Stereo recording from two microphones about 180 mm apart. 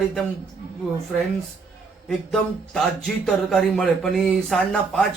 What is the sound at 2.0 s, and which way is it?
Speech, 5° left (ahead or behind).